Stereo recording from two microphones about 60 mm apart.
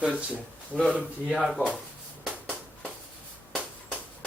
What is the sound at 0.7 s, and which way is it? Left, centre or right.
Speech, centre.